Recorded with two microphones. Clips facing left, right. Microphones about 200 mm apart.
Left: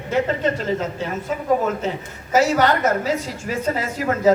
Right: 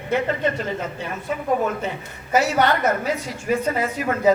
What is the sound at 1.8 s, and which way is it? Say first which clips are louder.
A woman's voice: left 3 dB; 60° right (ahead or behind).